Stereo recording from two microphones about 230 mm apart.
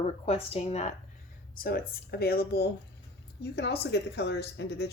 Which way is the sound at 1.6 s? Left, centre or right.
Left.